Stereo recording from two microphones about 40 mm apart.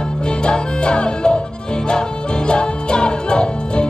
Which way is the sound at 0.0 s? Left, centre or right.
Left.